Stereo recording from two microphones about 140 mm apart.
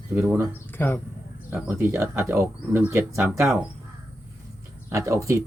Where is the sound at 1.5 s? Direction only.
15° right (ahead or behind).